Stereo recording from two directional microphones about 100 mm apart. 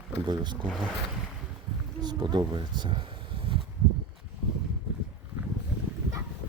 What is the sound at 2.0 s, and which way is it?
Speech, 45° right (ahead or behind).